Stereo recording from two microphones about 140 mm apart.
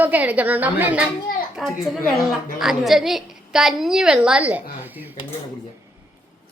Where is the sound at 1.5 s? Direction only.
Centre (ahead or behind).